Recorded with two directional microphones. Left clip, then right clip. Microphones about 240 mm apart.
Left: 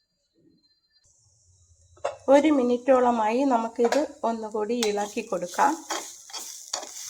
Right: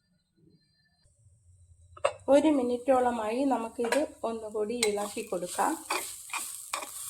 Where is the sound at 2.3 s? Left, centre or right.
Centre.